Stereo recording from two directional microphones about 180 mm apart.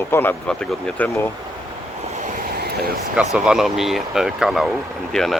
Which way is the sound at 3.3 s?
5° right (ahead or behind).